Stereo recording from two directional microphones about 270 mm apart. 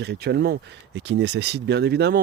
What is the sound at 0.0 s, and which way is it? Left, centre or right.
Speech, right.